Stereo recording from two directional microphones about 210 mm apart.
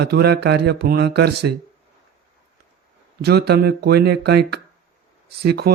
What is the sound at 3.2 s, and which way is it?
Speech, 50° right (ahead or behind).